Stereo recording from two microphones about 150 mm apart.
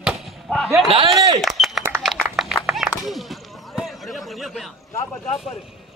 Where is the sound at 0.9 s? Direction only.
35° right (ahead or behind).